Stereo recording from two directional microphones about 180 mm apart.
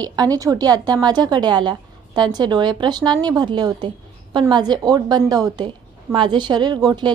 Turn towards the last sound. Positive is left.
turn(degrees=-25)  # may be behind; listen again after turning